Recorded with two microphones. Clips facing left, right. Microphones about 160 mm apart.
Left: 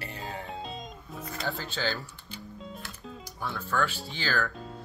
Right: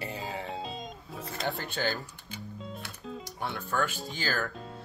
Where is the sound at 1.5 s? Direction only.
55° right (ahead or behind).